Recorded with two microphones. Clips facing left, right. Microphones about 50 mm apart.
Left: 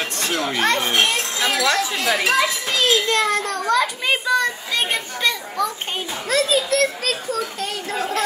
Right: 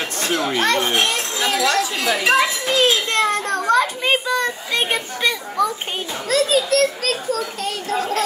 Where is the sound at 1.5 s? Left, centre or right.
Left.